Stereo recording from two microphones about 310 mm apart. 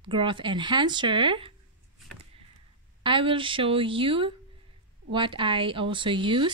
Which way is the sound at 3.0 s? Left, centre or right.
Centre.